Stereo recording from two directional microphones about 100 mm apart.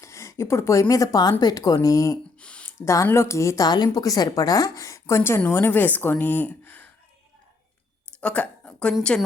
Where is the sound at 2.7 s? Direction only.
30° left (ahead or behind).